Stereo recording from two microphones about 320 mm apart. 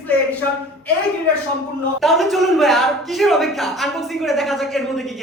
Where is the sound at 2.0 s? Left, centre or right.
Centre.